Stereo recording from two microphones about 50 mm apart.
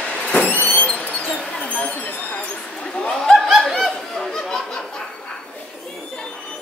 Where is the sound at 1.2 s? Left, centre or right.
Left.